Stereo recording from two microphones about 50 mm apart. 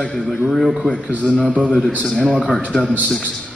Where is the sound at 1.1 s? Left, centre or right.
Left.